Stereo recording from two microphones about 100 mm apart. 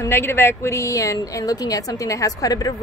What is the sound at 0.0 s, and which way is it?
A woman's voice, 25° left (ahead or behind).